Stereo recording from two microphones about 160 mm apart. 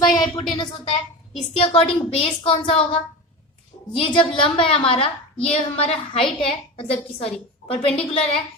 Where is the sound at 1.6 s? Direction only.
35° left (ahead or behind).